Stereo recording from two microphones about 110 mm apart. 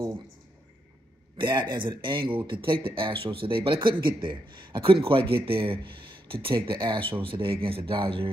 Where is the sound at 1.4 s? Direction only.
45° right (ahead or behind).